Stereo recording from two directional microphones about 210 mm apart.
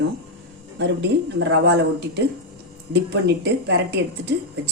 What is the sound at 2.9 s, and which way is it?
A woman's voice, 55° right (ahead or behind).